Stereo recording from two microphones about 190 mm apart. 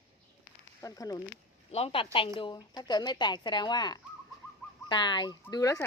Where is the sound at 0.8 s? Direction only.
20° left (ahead or behind).